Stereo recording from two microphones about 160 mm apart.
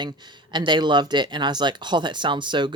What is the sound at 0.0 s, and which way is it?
Speech, 30° right (ahead or behind).